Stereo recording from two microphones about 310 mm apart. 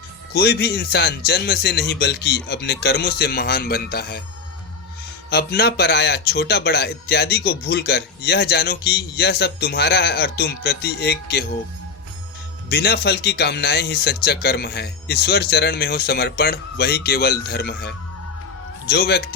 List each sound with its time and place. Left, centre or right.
0.3 s speech: left
5.3 s speech: left
12.6 s speech: left